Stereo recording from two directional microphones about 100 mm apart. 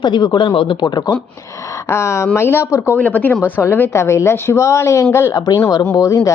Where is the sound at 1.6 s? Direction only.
30° left (ahead or behind).